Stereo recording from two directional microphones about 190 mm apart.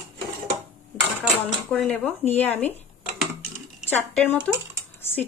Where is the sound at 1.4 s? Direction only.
Centre (ahead or behind).